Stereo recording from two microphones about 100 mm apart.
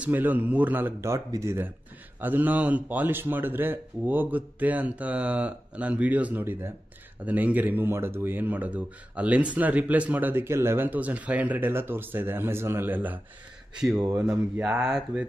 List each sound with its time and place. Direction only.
0.0 s speech: 20° right (ahead or behind)